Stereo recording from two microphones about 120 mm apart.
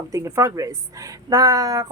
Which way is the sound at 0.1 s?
25° right (ahead or behind).